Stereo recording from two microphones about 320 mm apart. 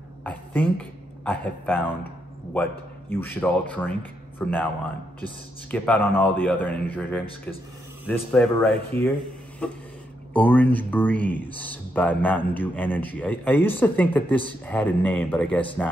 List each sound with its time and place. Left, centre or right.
0.2 s speech: centre
5.7 s speech: centre